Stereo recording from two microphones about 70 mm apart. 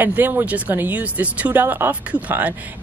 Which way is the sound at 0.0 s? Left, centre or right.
Right.